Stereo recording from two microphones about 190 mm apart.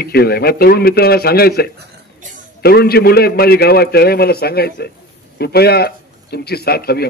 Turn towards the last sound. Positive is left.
turn(degrees=55)  # may be behind; listen again after turning